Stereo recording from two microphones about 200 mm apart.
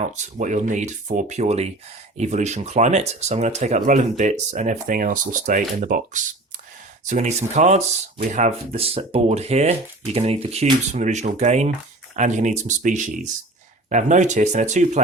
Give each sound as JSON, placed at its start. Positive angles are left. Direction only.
{"t": 0.0, "sound": "speech", "side_deg": -35}